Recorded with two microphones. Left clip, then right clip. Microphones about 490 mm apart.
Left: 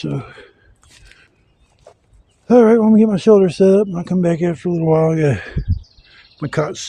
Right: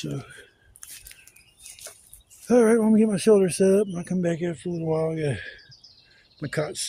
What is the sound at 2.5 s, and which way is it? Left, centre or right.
Speech, right.